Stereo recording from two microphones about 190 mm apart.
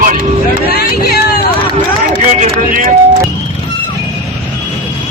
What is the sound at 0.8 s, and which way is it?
Run, 55° left (ahead or behind).